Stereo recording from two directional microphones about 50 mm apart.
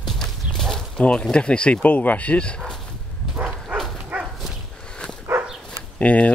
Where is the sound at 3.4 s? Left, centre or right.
Right.